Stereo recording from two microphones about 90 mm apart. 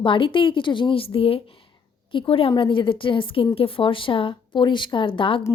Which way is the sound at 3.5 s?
85° left.